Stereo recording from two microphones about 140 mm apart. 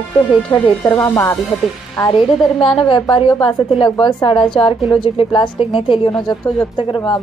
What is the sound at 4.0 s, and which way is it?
A woman's voice, 30° left (ahead or behind).